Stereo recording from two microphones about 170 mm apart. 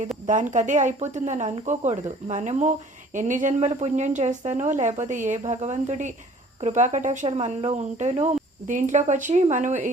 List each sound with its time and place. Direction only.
0.3 s speech: 45° right (ahead or behind)
7.3 s speech: 35° right (ahead or behind)